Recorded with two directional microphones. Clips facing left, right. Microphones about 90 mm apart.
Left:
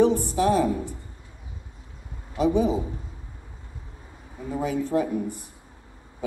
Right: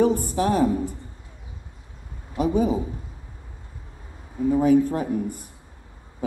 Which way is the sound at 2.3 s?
45° right (ahead or behind).